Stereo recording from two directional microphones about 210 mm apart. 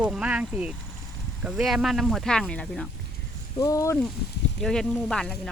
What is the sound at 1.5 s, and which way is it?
Speech, 5° right (ahead or behind).